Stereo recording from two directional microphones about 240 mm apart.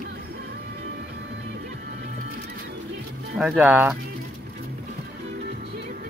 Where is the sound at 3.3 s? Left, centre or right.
Centre.